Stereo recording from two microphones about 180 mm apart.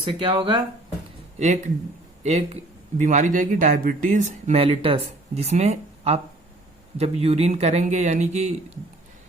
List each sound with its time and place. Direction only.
0.0 s speech: 30° right (ahead or behind)
1.4 s speech: 40° right (ahead or behind)